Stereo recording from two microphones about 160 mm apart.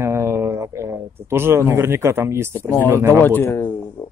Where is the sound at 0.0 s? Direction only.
15° right (ahead or behind).